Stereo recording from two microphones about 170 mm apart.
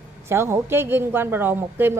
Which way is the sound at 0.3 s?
15° right (ahead or behind).